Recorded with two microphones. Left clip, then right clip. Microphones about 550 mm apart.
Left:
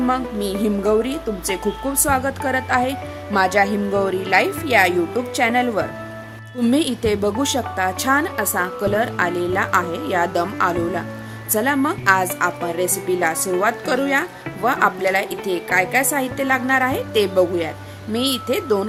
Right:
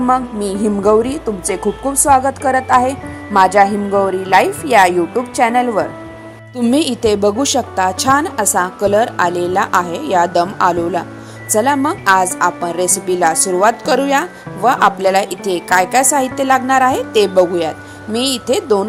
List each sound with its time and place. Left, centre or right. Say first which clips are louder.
0.1 s a woman's voice: right 6 dB; left